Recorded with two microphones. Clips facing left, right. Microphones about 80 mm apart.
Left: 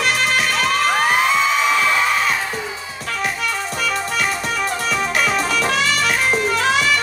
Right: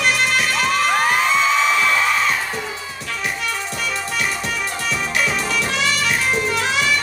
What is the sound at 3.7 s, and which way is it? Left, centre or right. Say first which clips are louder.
Music: left 3 dB; left.